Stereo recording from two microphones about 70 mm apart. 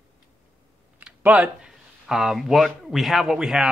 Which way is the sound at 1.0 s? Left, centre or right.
Centre.